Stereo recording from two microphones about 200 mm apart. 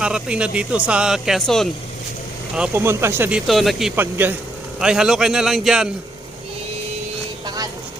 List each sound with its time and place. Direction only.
0.0 s speech: 5° right (ahead or behind)
2.6 s speech: 10° right (ahead or behind)
7.4 s vehicle: 20° right (ahead or behind)